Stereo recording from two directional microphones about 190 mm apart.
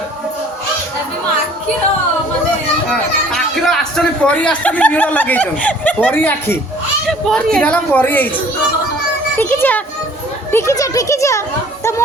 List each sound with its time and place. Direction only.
2.9 s a child's voice: centre (ahead or behind)
9.4 s a child's voice: 10° left (ahead or behind)